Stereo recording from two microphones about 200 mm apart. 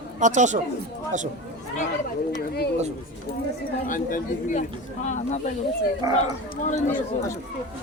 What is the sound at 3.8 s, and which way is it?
Speech, 40° left (ahead or behind).